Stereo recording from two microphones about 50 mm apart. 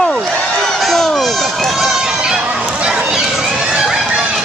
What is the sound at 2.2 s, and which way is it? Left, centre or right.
Fowl, centre.